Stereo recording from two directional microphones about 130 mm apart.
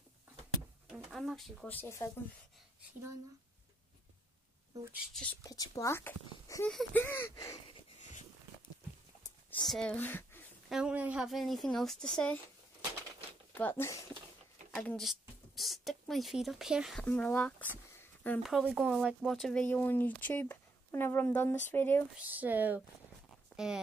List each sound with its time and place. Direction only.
0.8 s speech: centre (ahead or behind)
1.7 s speech: 20° left (ahead or behind)
5.4 s speech: 25° left (ahead or behind)
9.5 s speech: 5° left (ahead or behind)
10.7 s speech: 10° right (ahead or behind)
11.2 s speech: centre (ahead or behind)
13.6 s speech: 15° left (ahead or behind)
14.7 s speech: 5° left (ahead or behind)
17.0 s speech: 10° left (ahead or behind)
17.9 s a sound: 15° left (ahead or behind)
18.4 s speech: centre (ahead or behind); by 22.0 s 15° left (ahead or behind)
22.1 s speech: 10° right (ahead or behind)